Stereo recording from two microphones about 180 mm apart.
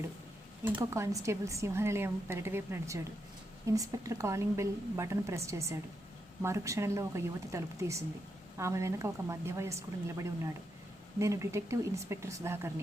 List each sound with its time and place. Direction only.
0.8 s a woman's voice: 15° right (ahead or behind)